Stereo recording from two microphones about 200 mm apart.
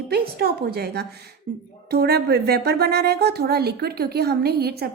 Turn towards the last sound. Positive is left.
turn(degrees=-50)  # may be behind; listen again after turning